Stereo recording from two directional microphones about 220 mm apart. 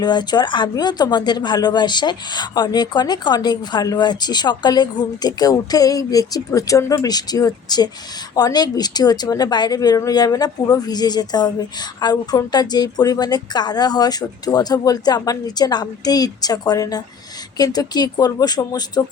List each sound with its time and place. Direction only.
0.0 s speech: 20° left (ahead or behind)